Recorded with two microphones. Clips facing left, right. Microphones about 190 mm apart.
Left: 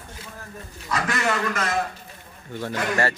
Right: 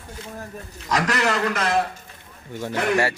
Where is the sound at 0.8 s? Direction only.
80° right.